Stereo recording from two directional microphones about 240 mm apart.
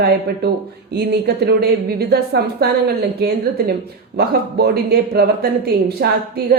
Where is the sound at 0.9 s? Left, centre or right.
Right.